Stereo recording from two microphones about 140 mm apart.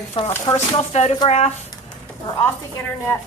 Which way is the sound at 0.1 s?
40° left (ahead or behind).